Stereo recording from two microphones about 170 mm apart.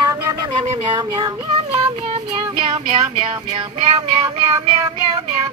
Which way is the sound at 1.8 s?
35° right (ahead or behind).